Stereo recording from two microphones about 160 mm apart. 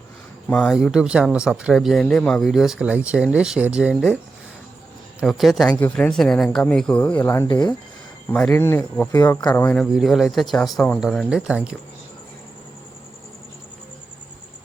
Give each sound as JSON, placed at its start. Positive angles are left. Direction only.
{"t": 0.5, "sound": "speech", "side_deg": 5}
{"t": 0.8, "sound": "speech", "side_deg": -5}
{"t": 5.2, "sound": "speech", "side_deg": 0}
{"t": 7.4, "sound": "speech", "side_deg": 25}
{"t": 8.3, "sound": "speech", "side_deg": 10}
{"t": 9.8, "sound": "speech", "side_deg": 0}